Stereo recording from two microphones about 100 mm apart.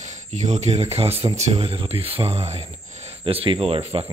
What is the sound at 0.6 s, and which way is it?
Speech, 90° right.